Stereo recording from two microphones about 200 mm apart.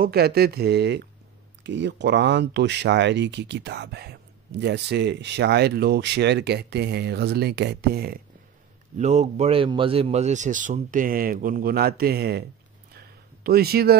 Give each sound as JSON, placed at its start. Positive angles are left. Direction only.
{"t": 0.0, "sound": "speech", "side_deg": -50}
{"t": 8.9, "sound": "speech", "side_deg": -35}
{"t": 12.9, "sound": "a sound", "side_deg": -50}